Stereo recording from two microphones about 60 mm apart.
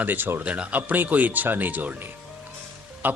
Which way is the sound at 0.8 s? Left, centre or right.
Right.